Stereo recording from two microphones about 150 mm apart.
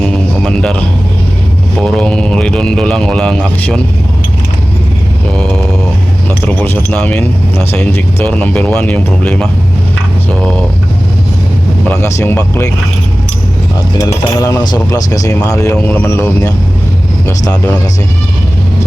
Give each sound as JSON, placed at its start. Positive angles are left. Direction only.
{"t": 0.0, "sound": "music", "side_deg": 5}
{"t": 1.8, "sound": "speech", "side_deg": 5}
{"t": 6.4, "sound": "speech", "side_deg": 15}
{"t": 11.9, "sound": "speech", "side_deg": 20}
{"t": 14.0, "sound": "speech", "side_deg": 20}